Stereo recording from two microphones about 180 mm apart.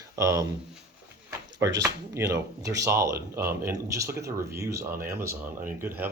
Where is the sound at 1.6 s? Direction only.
20° right (ahead or behind).